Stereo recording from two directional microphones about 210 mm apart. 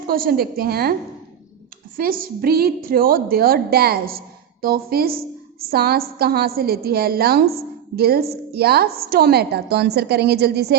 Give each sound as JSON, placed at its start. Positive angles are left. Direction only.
{"t": 0.1, "sound": "a woman's voice", "side_deg": -45}
{"t": 2.0, "sound": "a woman's voice", "side_deg": -45}